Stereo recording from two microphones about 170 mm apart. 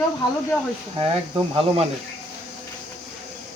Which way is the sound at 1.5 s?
35° right (ahead or behind).